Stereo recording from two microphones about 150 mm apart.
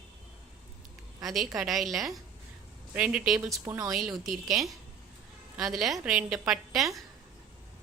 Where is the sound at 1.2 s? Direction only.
Centre (ahead or behind).